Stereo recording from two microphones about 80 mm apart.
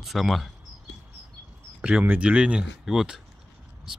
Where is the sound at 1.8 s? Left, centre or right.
Centre.